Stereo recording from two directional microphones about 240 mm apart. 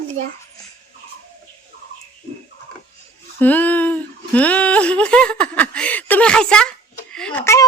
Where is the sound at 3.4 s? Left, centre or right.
Centre.